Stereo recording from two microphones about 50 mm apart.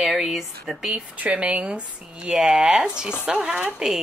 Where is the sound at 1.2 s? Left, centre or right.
Right.